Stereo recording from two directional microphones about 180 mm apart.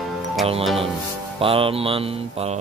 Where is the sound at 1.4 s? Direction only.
30° right (ahead or behind).